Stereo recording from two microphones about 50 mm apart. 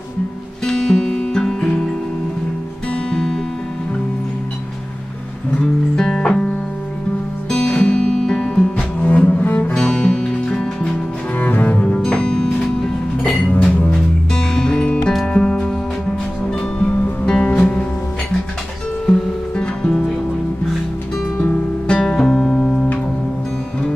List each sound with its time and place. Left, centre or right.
0.7 s music: centre
3.1 s music: centre
5.9 s music: centre
7.5 s music: centre
9.0 s cello: left
9.8 s music: centre
11.3 s cello: left
12.0 s music: centre
13.2 s music: left
14.3 s music: centre
16.7 s music: left
19.0 s music: centre
21.8 s music: centre